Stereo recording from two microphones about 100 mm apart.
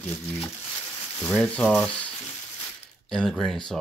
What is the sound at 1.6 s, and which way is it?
Speech, centre (ahead or behind).